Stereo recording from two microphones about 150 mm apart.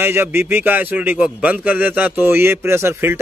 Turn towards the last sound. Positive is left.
turn(degrees=-15)  # may be behind; listen again after turning